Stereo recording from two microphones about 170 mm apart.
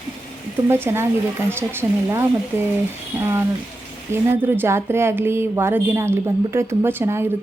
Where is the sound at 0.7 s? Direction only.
15° right (ahead or behind).